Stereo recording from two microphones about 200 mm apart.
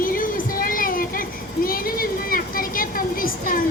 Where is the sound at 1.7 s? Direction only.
45° left (ahead or behind).